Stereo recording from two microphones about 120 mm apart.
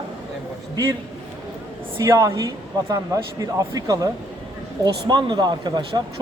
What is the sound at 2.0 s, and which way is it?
Speech, 25° right (ahead or behind).